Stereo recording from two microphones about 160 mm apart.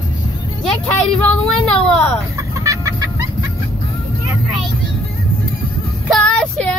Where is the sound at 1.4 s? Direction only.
5° left (ahead or behind).